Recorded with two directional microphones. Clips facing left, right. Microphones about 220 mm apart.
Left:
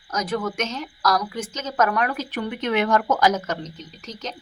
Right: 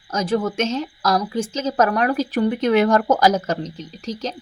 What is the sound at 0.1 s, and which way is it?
A woman's voice, 30° right (ahead or behind).